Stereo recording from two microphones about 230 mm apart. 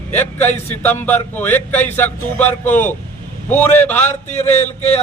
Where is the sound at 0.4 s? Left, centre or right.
Centre.